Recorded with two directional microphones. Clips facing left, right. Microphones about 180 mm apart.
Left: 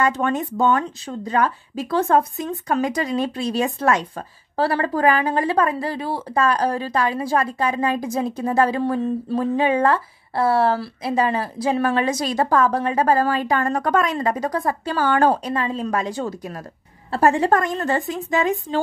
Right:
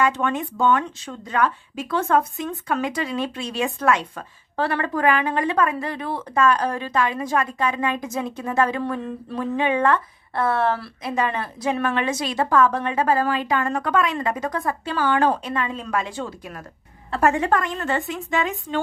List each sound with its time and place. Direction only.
0.0 s speech: 40° left (ahead or behind)